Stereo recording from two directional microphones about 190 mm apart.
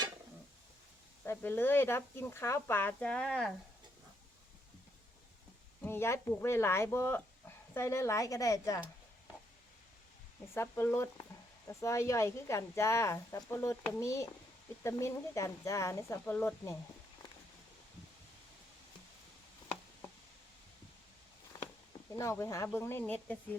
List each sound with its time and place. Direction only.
1.2 s speech: 10° left (ahead or behind)
5.8 s speech: 15° left (ahead or behind)
10.5 s speech: 15° left (ahead or behind)
22.1 s speech: 15° left (ahead or behind)